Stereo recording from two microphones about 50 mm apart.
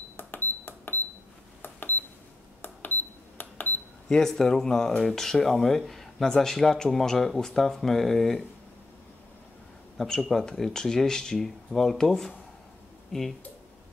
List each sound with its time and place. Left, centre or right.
0.2 s cash register: left
4.1 s speech: centre
9.9 s speech: centre